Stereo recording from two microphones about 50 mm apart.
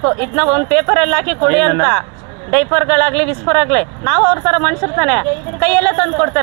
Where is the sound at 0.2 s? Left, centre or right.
Centre.